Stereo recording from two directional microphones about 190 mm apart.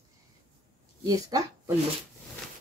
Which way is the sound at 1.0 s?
20° right (ahead or behind).